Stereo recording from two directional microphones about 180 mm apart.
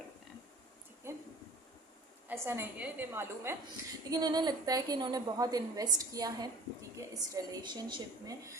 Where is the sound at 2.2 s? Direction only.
10° right (ahead or behind).